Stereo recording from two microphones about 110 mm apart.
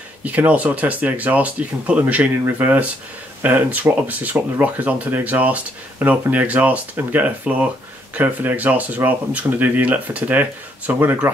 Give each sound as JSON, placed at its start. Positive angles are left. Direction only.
{"t": 0.2, "sound": "speech", "side_deg": -15}